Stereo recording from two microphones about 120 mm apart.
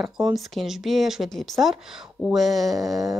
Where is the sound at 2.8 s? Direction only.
30° right (ahead or behind).